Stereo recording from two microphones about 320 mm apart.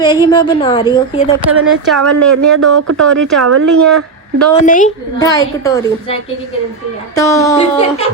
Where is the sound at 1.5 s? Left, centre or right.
Right.